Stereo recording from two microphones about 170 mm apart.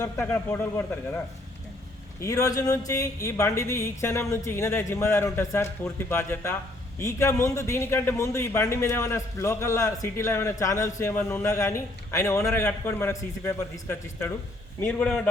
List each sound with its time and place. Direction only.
0.0 s a man's voice: 15° left (ahead or behind)
2.2 s a man's voice: 20° left (ahead or behind)